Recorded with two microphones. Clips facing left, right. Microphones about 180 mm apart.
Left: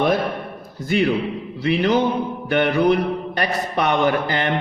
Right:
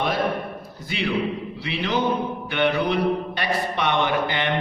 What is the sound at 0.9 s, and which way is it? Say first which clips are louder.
A man's voice: left 5 dB; 45° left (ahead or behind).